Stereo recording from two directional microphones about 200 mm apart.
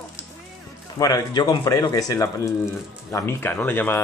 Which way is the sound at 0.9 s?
15° left (ahead or behind).